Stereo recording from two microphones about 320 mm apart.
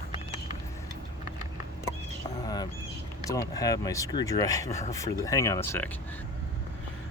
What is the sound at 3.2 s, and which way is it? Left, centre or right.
Speech, centre.